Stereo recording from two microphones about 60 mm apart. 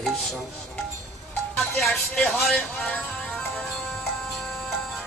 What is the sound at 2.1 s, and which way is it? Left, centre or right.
Speech, centre.